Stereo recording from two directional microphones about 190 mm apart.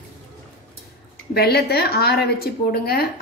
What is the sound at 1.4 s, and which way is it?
A woman's voice, 55° left (ahead or behind).